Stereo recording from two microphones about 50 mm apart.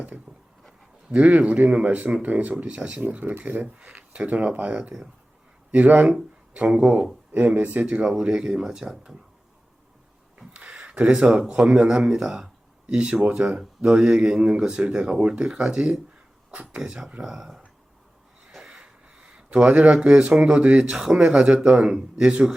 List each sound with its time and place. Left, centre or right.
0.3 s a sound: centre
1.1 s speech: right
3.0 s speech: right
8.2 s speech: centre
10.3 s speech: right
18.4 s a sound: centre
19.5 s speech: right